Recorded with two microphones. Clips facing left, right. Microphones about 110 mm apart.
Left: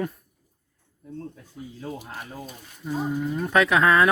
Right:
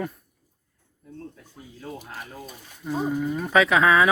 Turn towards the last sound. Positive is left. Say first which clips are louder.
# even
turn(degrees=0)  # may be behind; listen again after turning